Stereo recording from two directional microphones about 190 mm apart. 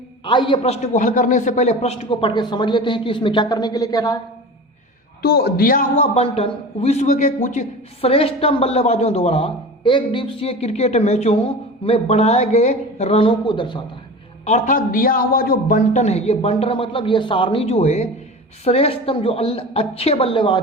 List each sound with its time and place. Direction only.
0.3 s a man's voice: 25° left (ahead or behind)
5.2 s speech: 55° left (ahead or behind)
6.1 s a man's voice: 30° left (ahead or behind)
14.4 s a man's voice: 40° left (ahead or behind)